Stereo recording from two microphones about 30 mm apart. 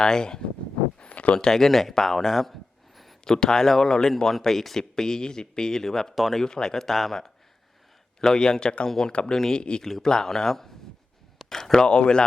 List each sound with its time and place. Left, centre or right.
0.0 s speech: left
1.1 s a sound: left
1.4 s speech: centre
1.7 s a sound: centre
3.2 s speech: centre
4.8 s speech: left
8.2 s speech: left
9.6 s speech: left
9.8 s speech: centre
11.3 s a sound: centre
11.7 s speech: left